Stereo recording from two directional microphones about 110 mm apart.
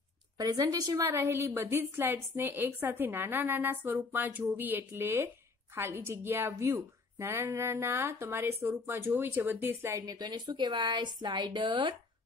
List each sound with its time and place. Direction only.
0.4 s a woman's voice: 35° right (ahead or behind)